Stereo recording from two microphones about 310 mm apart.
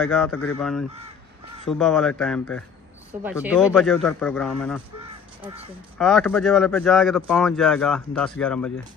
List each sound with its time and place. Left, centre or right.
0.0 s speech: centre
5.9 s speech: centre